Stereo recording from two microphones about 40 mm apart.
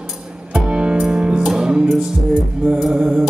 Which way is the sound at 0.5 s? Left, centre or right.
Right.